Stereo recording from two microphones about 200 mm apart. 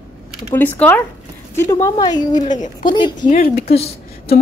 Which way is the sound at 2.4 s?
40° left (ahead or behind).